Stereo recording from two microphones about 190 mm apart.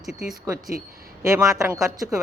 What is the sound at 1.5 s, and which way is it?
Speech, 15° right (ahead or behind).